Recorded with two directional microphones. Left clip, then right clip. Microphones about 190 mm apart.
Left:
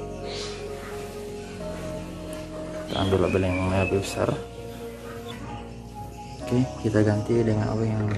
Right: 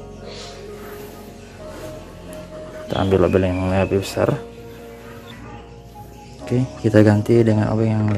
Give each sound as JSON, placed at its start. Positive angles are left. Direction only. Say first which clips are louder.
{"t": 2.9, "sound": "speech", "louder": "right 7 dB", "side_deg": -40}
{"t": 6.4, "sound": "speech", "louder": "right 4 dB", "side_deg": -25}
{"t": 6.9, "sound": "speech", "louder": "right 9 dB", "side_deg": -50}